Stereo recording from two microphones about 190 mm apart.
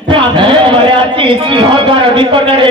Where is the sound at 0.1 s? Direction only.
25° right (ahead or behind).